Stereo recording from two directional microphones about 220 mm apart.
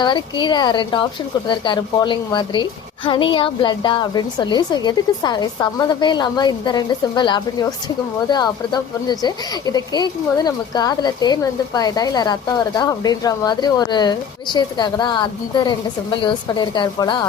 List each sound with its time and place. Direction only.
0.0 s speech: 20° left (ahead or behind)